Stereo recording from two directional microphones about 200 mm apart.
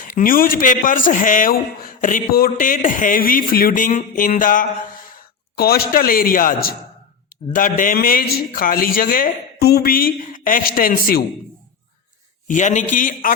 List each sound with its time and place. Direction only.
0.0 s a man's voice: 45° left (ahead or behind)
12.5 s a man's voice: 40° left (ahead or behind)